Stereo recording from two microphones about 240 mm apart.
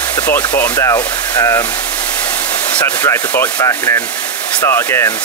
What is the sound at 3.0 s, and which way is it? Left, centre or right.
Sanding, centre.